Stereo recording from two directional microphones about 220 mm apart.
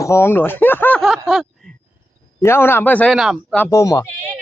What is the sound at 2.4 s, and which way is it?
A man's voice, 10° left (ahead or behind).